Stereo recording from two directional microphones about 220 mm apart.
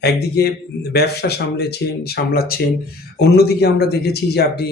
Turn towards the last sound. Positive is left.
turn(degrees=45)  # may be behind; listen again after turning